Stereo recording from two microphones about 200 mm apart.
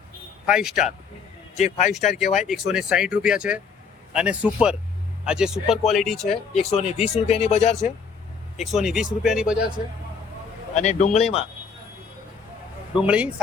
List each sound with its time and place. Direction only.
0.4 s speech: 5° right (ahead or behind)
1.5 s speech: 35° left (ahead or behind)
2.4 s speech: centre (ahead or behind)
6.7 s speech: 30° left (ahead or behind)
8.5 s speech: centre (ahead or behind)
10.8 s speech: 35° left (ahead or behind)
13.0 s speech: 5° right (ahead or behind)